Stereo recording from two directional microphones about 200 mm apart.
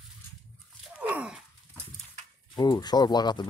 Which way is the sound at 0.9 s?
5° right (ahead or behind).